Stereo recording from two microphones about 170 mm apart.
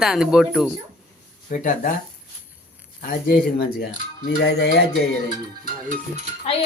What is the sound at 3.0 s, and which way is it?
Speech, 55° left (ahead or behind).